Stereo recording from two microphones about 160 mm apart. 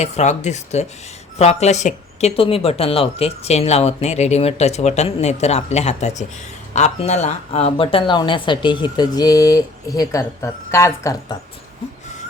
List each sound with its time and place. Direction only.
0.0 s a woman's voice: 45° left (ahead or behind); by 11.3 s 20° left (ahead or behind)